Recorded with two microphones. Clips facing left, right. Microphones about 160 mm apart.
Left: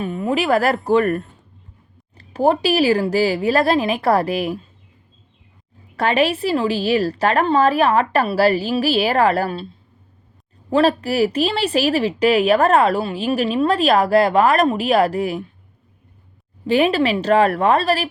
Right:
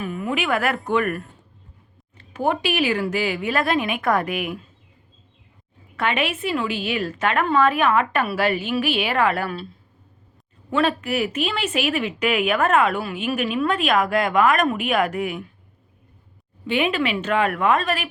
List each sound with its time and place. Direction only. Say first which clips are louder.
0.0 s a sound: left 4 dB; 20° left (ahead or behind)
0.3 s speech: left 6 dB; 35° left (ahead or behind)
6.0 s speech: left 6 dB; 35° left (ahead or behind)
16.6 s speech: left 6 dB; 35° left (ahead or behind)